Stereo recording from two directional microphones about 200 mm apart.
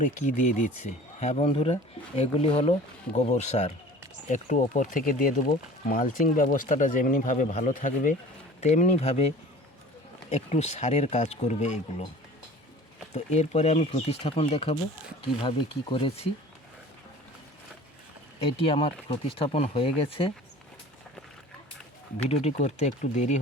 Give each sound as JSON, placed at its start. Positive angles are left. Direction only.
{"t": 0.0, "sound": "speech", "side_deg": 40}
{"t": 13.1, "sound": "speech", "side_deg": 35}
{"t": 18.3, "sound": "speech", "side_deg": 25}
{"t": 22.3, "sound": "speech", "side_deg": 35}